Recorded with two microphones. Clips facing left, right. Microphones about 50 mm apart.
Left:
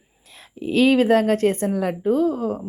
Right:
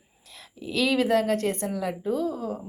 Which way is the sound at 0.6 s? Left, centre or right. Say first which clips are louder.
Left 7 dB; left.